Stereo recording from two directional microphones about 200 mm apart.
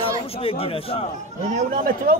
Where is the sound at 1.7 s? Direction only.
45° right (ahead or behind).